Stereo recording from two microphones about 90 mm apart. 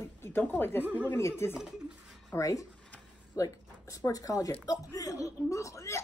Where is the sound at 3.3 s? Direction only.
40° left (ahead or behind).